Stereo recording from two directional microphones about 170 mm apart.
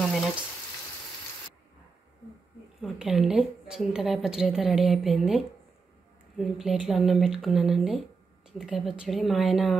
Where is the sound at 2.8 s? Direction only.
5° right (ahead or behind).